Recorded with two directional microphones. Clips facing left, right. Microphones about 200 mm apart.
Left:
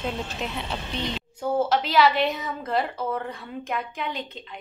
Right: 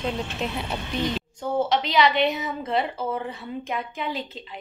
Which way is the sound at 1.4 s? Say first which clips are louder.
Left 1 dB; 5° left (ahead or behind).